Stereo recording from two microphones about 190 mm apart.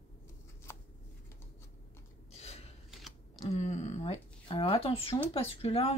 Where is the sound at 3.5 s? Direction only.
35° left (ahead or behind).